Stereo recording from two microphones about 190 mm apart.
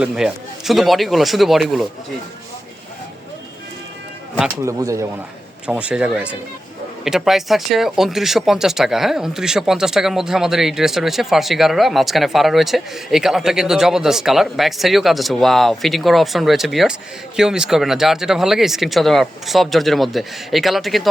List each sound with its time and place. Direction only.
0.0 s speech: 5° right (ahead or behind)
4.4 s speech: 5° right (ahead or behind)
4.8 s speech: 15° right (ahead or behind)
5.6 s speech: 5° right (ahead or behind)